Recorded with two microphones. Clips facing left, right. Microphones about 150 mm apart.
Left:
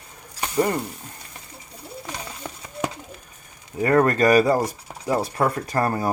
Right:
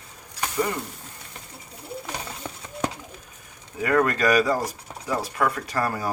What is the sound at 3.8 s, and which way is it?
Speech, 35° left (ahead or behind).